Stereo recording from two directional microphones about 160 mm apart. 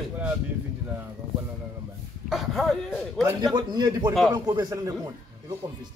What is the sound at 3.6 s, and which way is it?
A man's voice, 25° right (ahead or behind).